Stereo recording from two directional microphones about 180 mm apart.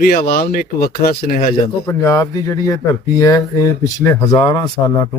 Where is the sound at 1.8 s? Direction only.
15° left (ahead or behind).